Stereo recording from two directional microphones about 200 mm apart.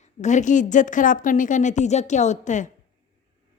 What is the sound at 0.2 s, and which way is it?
Speech, 35° left (ahead or behind).